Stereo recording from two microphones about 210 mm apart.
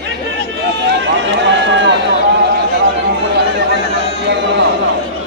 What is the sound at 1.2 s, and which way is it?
Run, 60° right (ahead or behind).